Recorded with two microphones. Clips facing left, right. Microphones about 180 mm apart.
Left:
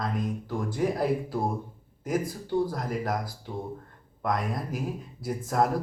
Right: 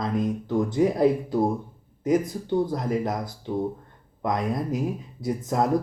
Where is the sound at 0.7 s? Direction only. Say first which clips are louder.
Right 5 dB; 25° right (ahead or behind).